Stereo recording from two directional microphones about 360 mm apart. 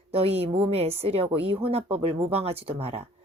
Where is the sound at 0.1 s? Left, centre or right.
Centre.